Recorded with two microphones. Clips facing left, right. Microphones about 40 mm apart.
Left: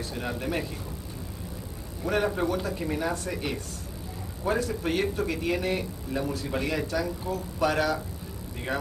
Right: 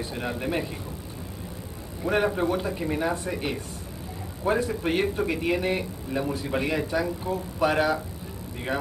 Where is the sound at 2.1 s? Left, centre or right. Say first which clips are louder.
Right 2 dB; centre.